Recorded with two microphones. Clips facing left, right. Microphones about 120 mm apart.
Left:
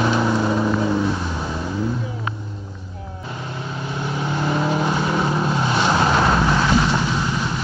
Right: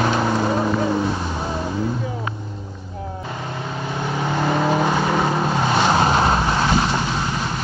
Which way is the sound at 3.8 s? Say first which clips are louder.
Right 1 dB; 55° right (ahead or behind).